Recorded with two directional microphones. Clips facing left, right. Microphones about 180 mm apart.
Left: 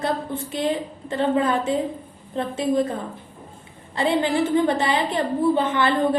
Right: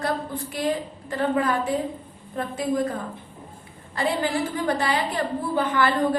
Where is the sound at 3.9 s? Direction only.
25° left (ahead or behind).